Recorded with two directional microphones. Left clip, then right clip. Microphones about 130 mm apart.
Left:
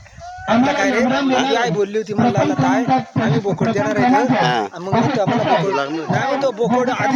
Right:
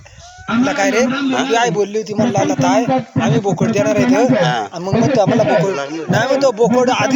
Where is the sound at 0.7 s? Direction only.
15° right (ahead or behind).